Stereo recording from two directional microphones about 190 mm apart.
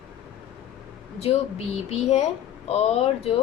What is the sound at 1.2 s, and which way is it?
A woman's voice, 35° left (ahead or behind).